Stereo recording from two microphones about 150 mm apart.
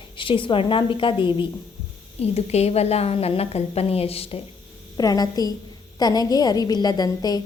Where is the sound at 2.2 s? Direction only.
45° left (ahead or behind).